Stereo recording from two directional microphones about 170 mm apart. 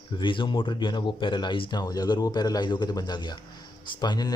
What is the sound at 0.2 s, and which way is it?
Speech, 30° left (ahead or behind).